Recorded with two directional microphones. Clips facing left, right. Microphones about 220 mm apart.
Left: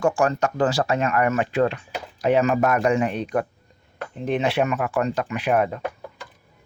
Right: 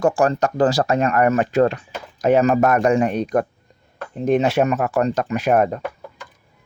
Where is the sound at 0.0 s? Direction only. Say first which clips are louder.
Right 3 dB; 35° right (ahead or behind).